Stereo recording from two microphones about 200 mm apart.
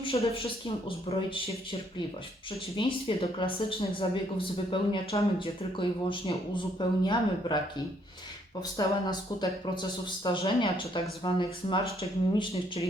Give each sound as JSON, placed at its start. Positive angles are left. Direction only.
{"t": 0.0, "sound": "a sound", "side_deg": 30}
{"t": 0.9, "sound": "speech", "side_deg": 25}
{"t": 2.7, "sound": "speech", "side_deg": 25}
{"t": 8.8, "sound": "speech", "side_deg": 20}